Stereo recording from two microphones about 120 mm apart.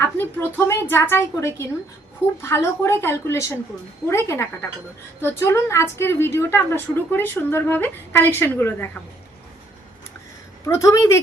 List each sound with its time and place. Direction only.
0.2 s a woman's voice: 20° left (ahead or behind)
10.7 s a woman's voice: 25° left (ahead or behind)